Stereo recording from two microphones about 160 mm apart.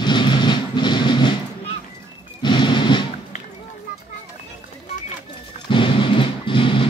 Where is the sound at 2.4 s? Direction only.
30° left (ahead or behind).